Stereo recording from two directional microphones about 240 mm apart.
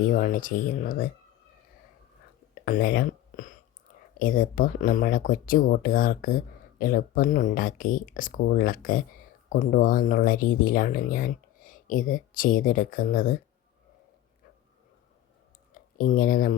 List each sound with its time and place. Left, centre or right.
0.0 s speech: left
2.6 s speech: left
15.7 s speech: left